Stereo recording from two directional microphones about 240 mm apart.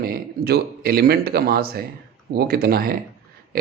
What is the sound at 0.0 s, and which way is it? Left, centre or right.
Speech, right.